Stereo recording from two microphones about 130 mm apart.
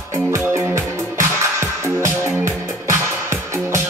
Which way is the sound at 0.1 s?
20° right (ahead or behind).